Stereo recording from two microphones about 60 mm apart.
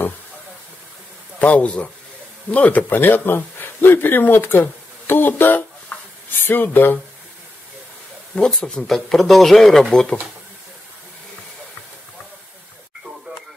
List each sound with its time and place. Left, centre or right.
1.4 s speech: left
8.4 s speech: centre